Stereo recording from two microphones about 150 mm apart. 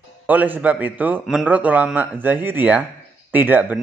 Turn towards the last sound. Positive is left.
turn(degrees=-10)  # may be behind; listen again after turning